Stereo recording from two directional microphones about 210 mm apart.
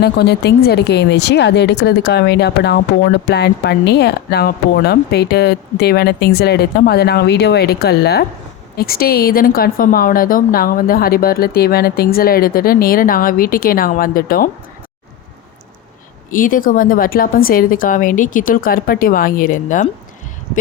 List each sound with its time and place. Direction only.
0.0 s speech: 50° left (ahead or behind)
16.3 s a woman's voice: 40° left (ahead or behind)